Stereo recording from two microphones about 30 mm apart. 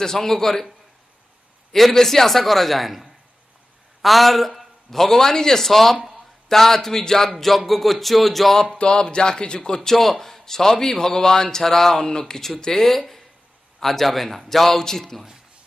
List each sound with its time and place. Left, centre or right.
0.0 s a man's voice: centre
1.7 s a man's voice: centre
5.7 s a man's voice: centre
5.9 s a sound: centre
6.5 s a man's voice: centre
8.7 s speech: left
9.8 s a man's voice: centre
12.0 s speech: left
12.8 s a man's voice: centre